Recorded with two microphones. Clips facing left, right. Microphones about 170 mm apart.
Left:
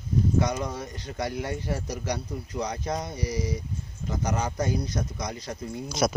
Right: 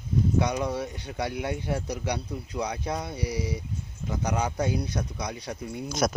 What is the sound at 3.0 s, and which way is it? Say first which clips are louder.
Speech: even; 60° right (ahead or behind).